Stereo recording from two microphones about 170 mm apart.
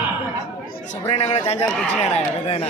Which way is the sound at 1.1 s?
40° left (ahead or behind).